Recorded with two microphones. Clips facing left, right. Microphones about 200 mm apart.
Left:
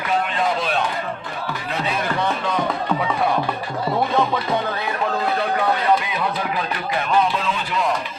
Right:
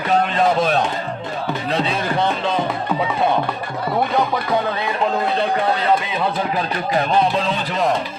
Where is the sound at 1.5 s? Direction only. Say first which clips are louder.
Right 4 dB; 30° right (ahead or behind).